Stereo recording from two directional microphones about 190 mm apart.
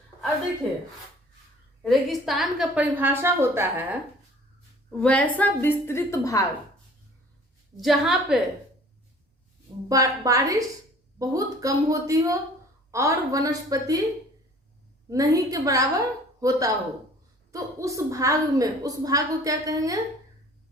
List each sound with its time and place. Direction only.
1.8 s a woman's voice: centre (ahead or behind)
4.9 s a woman's voice: 5° left (ahead or behind)
7.8 s a woman's voice: centre (ahead or behind)
9.9 s a woman's voice: 20° right (ahead or behind)
15.1 s a woman's voice: 20° right (ahead or behind)